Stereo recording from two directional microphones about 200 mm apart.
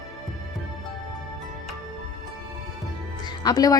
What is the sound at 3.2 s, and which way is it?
Music, 20° left (ahead or behind).